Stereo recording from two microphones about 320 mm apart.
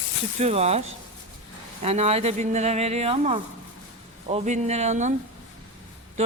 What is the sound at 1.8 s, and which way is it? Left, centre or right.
Speech, centre.